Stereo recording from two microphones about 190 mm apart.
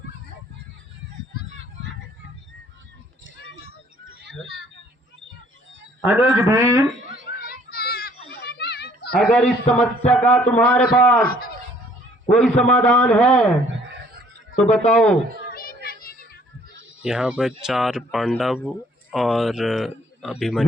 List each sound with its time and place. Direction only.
6.0 s a man's voice: 5° right (ahead or behind)
7.3 s children playing: 55° left (ahead or behind)
9.1 s speech: centre (ahead or behind)
9.4 s a man's voice: 35° left (ahead or behind)
10.1 s speech: 5° left (ahead or behind)
11.3 s a sound: 50° left (ahead or behind)
12.3 s speech: 5° left (ahead or behind)
13.7 s a sound: 70° right (ahead or behind)
14.8 s speech: 5° left (ahead or behind)
15.5 s a sound: 50° left (ahead or behind)
17.0 s speech: 5° right (ahead or behind)